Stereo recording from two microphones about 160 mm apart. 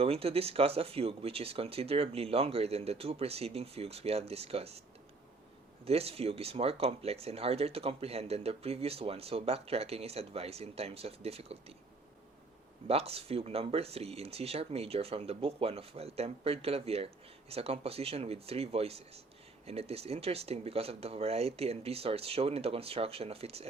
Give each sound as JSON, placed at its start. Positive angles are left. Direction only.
{"t": 0.0, "sound": "speech", "side_deg": -40}
{"t": 5.8, "sound": "speech", "side_deg": -40}
{"t": 12.9, "sound": "speech", "side_deg": -40}